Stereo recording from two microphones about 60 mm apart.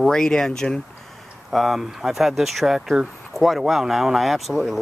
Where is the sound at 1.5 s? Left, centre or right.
Centre.